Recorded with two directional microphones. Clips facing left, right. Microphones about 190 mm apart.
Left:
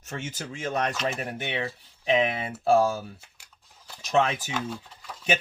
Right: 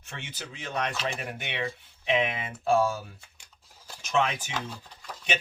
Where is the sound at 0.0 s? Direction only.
45° left (ahead or behind).